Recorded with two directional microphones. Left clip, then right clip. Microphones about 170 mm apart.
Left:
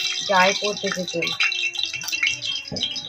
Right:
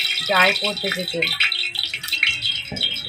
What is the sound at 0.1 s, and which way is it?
Speech, 15° right (ahead or behind).